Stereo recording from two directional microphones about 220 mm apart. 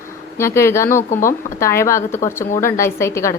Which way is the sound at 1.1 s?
35° left (ahead or behind).